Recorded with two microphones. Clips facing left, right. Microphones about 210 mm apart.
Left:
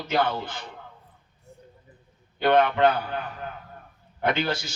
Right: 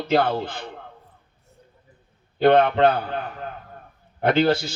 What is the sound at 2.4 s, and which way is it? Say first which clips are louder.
Speech: right 4 dB; 30° right (ahead or behind).